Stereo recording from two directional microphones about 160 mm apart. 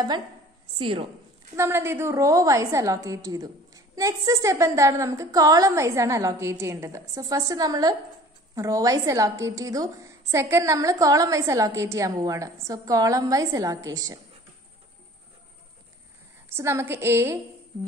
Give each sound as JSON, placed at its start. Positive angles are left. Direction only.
{"t": 0.7, "sound": "a woman's voice", "side_deg": -35}
{"t": 1.6, "sound": "a woman's voice", "side_deg": -15}
{"t": 16.4, "sound": "a woman's voice", "side_deg": -15}